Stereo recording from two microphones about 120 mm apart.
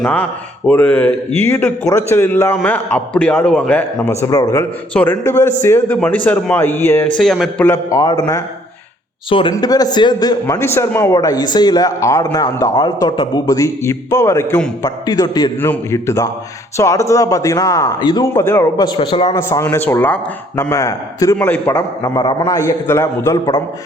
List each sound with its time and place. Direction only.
0.0 s a man's voice: 10° left (ahead or behind)
4.3 s a man's voice: 25° left (ahead or behind)
7.2 s a man's voice: centre (ahead or behind)
7.6 s a man's voice: 20° left (ahead or behind)
9.6 s a man's voice: 30° left (ahead or behind)
15.6 s a man's voice: 20° left (ahead or behind); by 19.4 s 45° left (ahead or behind)
19.4 s a man's voice: 25° left (ahead or behind)
21.3 s a man's voice: 15° left (ahead or behind)
22.0 s a man's voice: 40° left (ahead or behind)
22.4 s a man's voice: 20° left (ahead or behind)